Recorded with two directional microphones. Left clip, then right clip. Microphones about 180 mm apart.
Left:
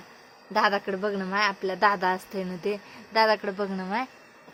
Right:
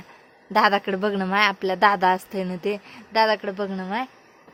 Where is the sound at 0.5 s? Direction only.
20° right (ahead or behind).